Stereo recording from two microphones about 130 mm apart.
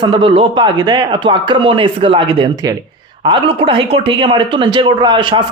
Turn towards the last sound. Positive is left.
turn(degrees=-40)  # may be behind; listen again after turning